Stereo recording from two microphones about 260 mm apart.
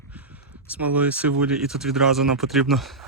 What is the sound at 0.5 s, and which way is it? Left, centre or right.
Speech, centre.